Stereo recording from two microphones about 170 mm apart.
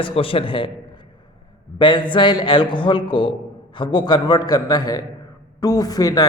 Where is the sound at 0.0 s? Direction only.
30° left (ahead or behind).